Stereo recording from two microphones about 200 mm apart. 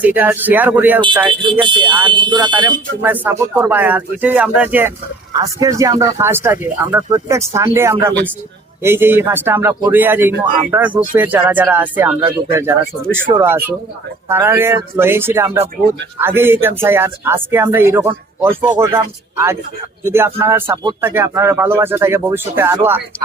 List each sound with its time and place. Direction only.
0.0 s speech: 10° right (ahead or behind)
1.3 s speech: 25° right (ahead or behind)
3.0 s speech: 10° right (ahead or behind)